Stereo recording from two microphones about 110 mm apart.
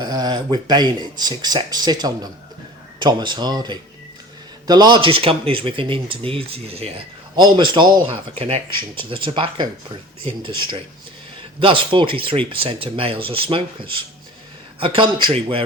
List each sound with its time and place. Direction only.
0.0 s speech: 40° right (ahead or behind); by 7.0 s 65° right (ahead or behind)
7.3 s speech: 45° right (ahead or behind)